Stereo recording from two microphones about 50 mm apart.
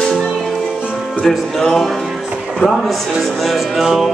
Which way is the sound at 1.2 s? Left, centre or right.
Centre.